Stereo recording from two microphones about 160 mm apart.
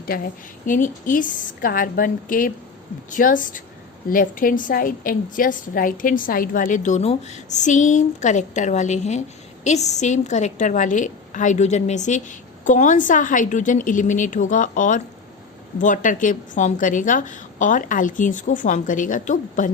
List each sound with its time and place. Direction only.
0.0 s a woman's voice: 65° left (ahead or behind)